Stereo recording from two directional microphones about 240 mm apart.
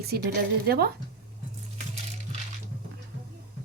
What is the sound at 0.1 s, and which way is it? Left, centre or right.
Speech, right.